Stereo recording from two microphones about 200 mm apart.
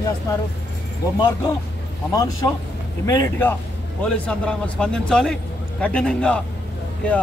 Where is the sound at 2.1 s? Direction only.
15° left (ahead or behind).